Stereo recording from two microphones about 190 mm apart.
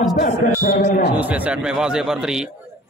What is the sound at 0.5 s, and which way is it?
Speech, 45° left (ahead or behind).